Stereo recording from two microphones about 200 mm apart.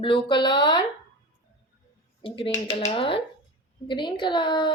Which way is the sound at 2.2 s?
25° left (ahead or behind).